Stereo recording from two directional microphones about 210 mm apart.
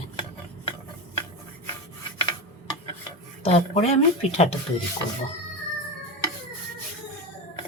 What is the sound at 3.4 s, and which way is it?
Speech, 30° left (ahead or behind).